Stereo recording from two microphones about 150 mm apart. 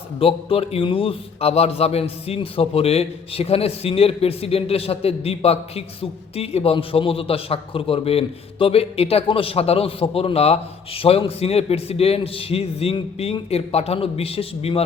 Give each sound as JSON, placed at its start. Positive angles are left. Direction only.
{"t": 0.2, "sound": "a man's voice", "side_deg": 40}